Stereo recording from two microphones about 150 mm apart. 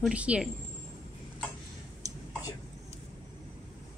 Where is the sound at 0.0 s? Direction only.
10° right (ahead or behind).